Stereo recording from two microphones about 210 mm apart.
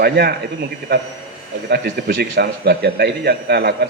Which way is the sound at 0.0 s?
50° right (ahead or behind).